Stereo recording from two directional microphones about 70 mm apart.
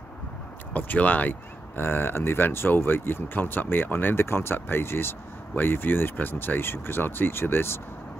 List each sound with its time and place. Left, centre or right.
0.7 s speech: left